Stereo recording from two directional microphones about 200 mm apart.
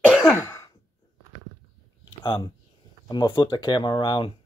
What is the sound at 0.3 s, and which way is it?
Throat clearing, 15° left (ahead or behind).